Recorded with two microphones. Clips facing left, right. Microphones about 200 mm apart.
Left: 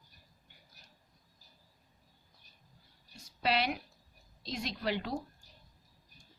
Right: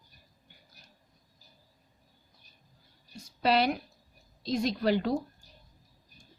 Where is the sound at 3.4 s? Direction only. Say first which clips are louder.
Right 6 dB; 40° right (ahead or behind).